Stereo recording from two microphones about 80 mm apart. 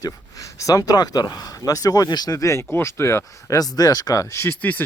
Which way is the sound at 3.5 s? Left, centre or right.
Left.